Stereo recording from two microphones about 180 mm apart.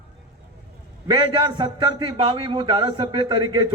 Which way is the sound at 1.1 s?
25° right (ahead or behind).